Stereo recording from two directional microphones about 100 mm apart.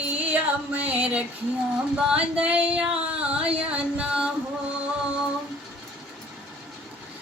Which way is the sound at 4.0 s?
10° right (ahead or behind).